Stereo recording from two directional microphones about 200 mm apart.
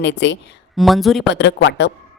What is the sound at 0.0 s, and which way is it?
Speech, 60° left (ahead or behind).